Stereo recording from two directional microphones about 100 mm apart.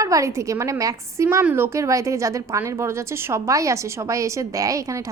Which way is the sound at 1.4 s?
20° right (ahead or behind).